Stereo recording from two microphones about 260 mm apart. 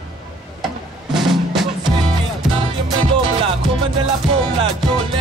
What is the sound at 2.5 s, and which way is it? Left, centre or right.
Music, right.